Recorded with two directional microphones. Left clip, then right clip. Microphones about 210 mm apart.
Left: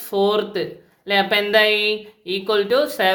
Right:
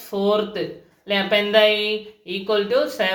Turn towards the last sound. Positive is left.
turn(degrees=55)  # may be behind; listen again after turning